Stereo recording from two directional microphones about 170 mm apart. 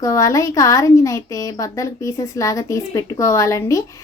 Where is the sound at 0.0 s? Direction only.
20° left (ahead or behind).